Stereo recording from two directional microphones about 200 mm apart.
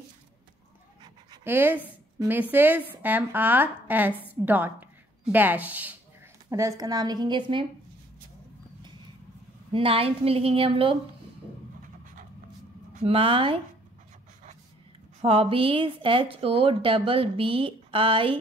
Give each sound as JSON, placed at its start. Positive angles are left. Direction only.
{"t": 1.4, "sound": "a woman's voice", "side_deg": -10}
{"t": 9.7, "sound": "speech", "side_deg": -25}
{"t": 13.0, "sound": "speech", "side_deg": -25}
{"t": 15.2, "sound": "speech", "side_deg": -30}